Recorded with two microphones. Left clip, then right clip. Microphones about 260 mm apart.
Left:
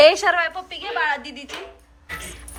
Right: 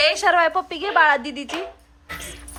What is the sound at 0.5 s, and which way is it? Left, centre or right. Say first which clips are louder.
Speech: right 7 dB; right.